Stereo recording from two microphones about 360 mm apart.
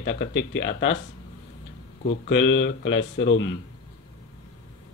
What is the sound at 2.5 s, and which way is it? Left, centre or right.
Speech, left.